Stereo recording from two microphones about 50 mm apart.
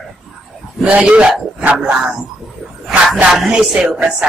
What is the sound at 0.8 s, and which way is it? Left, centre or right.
Speech, right.